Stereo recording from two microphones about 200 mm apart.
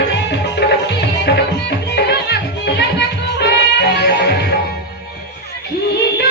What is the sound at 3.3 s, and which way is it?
Music, 55° left (ahead or behind).